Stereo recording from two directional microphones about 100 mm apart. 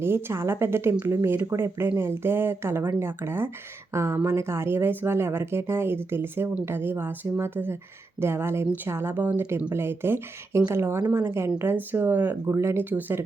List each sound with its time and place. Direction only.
0.0 s speech: 25° right (ahead or behind)